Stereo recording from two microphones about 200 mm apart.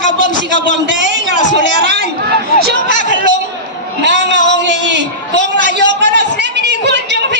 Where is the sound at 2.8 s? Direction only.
40° left (ahead or behind).